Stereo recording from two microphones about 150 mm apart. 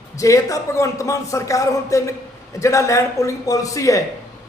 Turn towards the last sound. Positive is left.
turn(degrees=20)  # may be behind; listen again after turning